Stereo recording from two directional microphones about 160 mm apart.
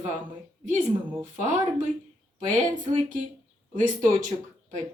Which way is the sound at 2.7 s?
55° right (ahead or behind).